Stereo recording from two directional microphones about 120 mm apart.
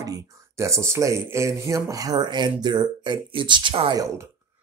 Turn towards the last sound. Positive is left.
turn(degrees=-45)  # may be behind; listen again after turning